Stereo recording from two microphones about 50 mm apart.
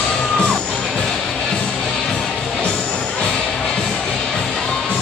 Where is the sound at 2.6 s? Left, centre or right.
Centre.